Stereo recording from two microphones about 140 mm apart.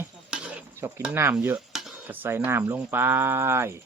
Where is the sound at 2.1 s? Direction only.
15° right (ahead or behind).